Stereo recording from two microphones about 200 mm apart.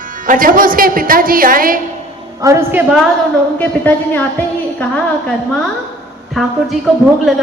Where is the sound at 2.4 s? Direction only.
15° right (ahead or behind).